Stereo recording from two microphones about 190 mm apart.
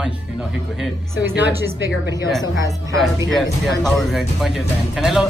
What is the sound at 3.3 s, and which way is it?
Speech, centre (ahead or behind).